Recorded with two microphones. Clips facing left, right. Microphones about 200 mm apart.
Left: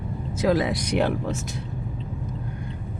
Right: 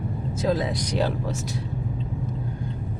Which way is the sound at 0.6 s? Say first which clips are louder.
Left 2 dB; 75° left (ahead or behind).